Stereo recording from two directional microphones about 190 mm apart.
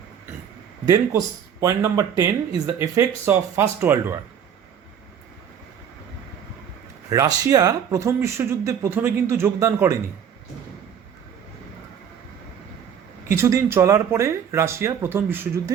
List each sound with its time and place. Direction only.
1.6 s speech: 15° right (ahead or behind)
7.1 s speech: 15° right (ahead or behind)
13.2 s speech: 15° right (ahead or behind)